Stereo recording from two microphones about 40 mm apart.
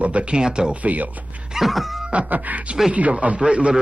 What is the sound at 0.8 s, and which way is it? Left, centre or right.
Speech, right.